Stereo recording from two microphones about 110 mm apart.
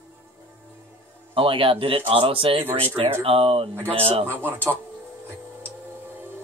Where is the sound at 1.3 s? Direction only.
55° right (ahead or behind).